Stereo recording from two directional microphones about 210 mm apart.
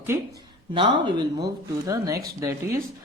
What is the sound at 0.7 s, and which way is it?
Speech, 25° right (ahead or behind).